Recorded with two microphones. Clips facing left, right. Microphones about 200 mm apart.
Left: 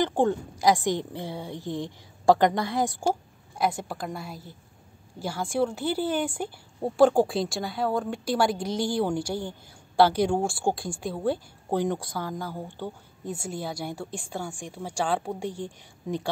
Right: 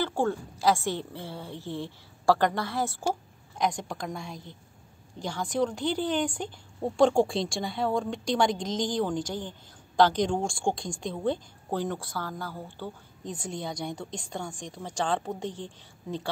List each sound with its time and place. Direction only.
0.0 s a woman's voice: 15° left (ahead or behind)